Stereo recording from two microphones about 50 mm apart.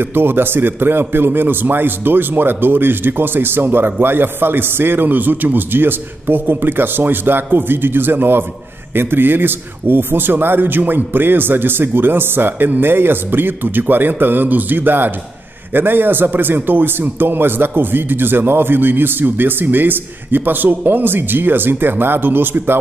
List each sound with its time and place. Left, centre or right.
0.0 s a man's voice: right